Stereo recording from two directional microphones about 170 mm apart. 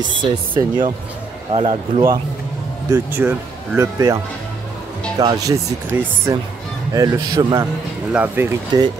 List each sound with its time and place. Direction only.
0.1 s speech: 25° right (ahead or behind)
2.9 s speech: 15° right (ahead or behind)
5.2 s speech: 20° right (ahead or behind)
8.1 s speech: 10° right (ahead or behind)